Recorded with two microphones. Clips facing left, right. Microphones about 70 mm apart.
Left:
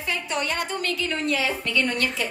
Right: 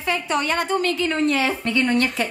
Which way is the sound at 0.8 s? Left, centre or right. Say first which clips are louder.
Right 6 dB; right.